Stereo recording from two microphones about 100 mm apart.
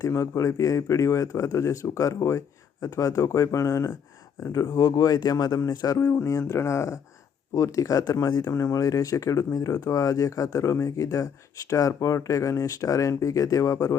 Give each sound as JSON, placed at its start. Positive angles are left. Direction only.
{"t": 0.0, "sound": "speech", "side_deg": 30}